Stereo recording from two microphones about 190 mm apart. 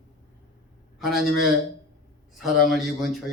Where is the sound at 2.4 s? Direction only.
Centre (ahead or behind).